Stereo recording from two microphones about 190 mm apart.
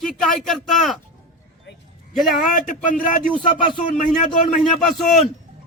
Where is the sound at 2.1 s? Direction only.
Centre (ahead or behind).